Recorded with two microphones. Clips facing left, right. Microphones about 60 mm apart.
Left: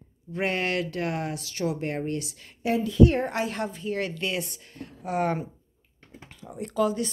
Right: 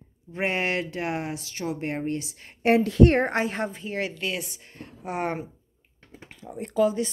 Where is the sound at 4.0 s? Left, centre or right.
Centre.